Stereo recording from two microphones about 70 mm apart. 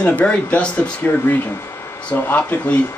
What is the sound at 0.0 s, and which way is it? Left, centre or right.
Speech, centre.